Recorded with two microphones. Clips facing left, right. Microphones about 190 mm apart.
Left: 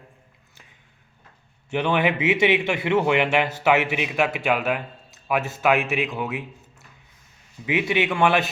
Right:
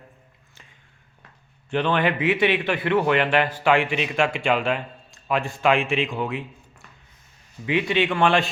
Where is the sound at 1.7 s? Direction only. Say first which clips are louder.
Even; 10° left (ahead or behind).